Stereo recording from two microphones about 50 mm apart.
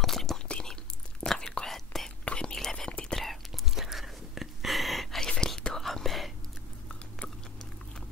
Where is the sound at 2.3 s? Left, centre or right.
Centre.